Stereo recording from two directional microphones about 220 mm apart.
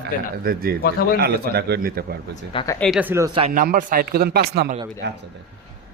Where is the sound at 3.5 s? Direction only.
40° right (ahead or behind).